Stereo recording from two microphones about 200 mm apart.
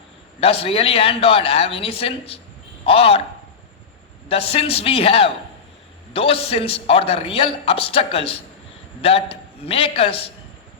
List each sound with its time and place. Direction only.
0.3 s a man's voice: 30° left (ahead or behind)
4.3 s a man's voice: 30° left (ahead or behind)